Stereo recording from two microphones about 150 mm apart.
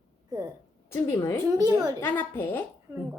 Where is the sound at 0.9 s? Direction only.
15° left (ahead or behind).